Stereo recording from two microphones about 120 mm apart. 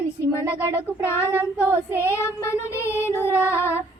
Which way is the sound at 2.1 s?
20° left (ahead or behind).